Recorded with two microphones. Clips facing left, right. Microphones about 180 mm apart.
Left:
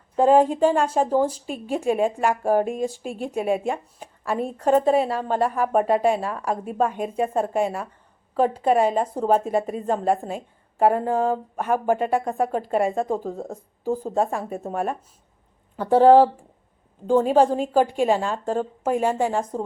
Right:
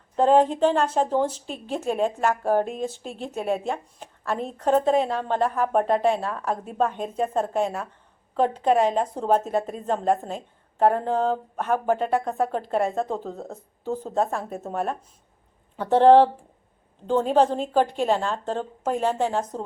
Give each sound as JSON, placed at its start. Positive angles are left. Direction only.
{"t": 0.2, "sound": "a woman's voice", "side_deg": 10}